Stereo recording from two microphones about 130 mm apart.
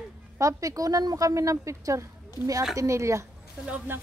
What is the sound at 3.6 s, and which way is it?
Speech, 10° right (ahead or behind).